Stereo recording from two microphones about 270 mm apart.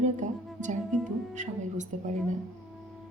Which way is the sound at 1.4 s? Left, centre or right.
Right.